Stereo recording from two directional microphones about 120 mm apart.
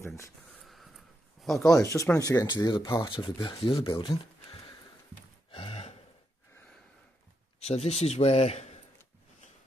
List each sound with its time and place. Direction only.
0.0 s speech: 25° left (ahead or behind)
0.5 s a sound: centre (ahead or behind)
1.6 s speech: 25° left (ahead or behind); by 3.9 s 45° left (ahead or behind)
5.5 s throat clearing: 50° left (ahead or behind)
7.6 s a man's voice: 60° left (ahead or behind)